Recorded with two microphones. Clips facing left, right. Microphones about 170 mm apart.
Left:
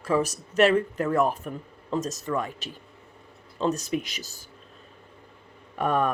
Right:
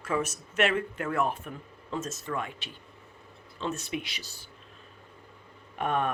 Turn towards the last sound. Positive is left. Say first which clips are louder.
# left 4 dB
turn(degrees=40)  # may be behind; listen again after turning